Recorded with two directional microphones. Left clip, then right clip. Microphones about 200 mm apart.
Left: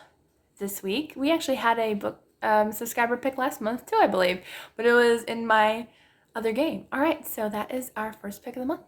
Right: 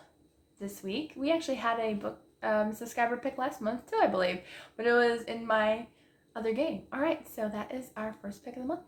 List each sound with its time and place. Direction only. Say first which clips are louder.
0.6 s speech: left 7 dB; 45° left (ahead or behind)